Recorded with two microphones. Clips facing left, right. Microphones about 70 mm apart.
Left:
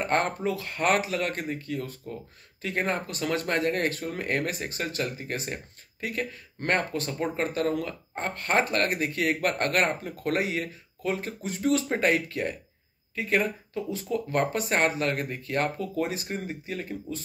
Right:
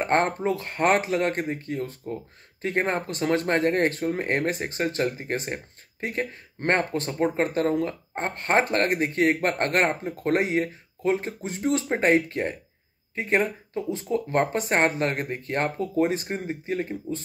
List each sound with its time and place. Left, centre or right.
0.0 s speech: right